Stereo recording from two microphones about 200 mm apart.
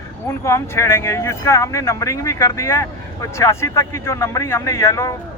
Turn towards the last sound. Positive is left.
turn(degrees=15)  # may be behind; listen again after turning